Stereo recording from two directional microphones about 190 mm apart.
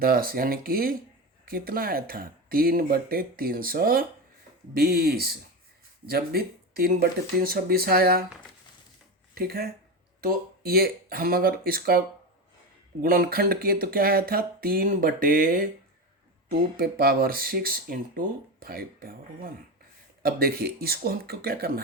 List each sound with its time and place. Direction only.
0.0 s speech: 50° right (ahead or behind)
9.3 s speech: 55° right (ahead or behind)